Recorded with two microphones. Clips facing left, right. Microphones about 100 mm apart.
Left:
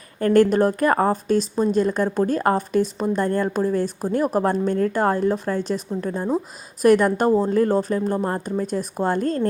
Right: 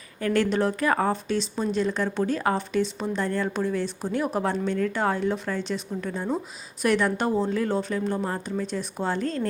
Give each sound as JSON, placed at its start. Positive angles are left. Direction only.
{"t": 0.2, "sound": "a woman's voice", "side_deg": 45}